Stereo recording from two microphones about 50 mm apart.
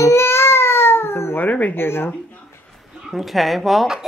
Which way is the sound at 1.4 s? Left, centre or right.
Left.